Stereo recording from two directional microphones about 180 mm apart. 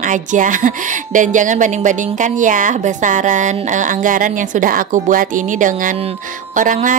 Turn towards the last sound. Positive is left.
turn(degrees=-45)  # may be behind; listen again after turning